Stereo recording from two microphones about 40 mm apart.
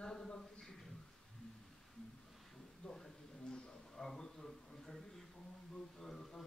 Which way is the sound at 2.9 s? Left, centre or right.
Centre.